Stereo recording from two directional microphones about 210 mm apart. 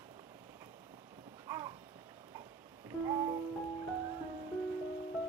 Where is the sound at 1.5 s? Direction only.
10° right (ahead or behind).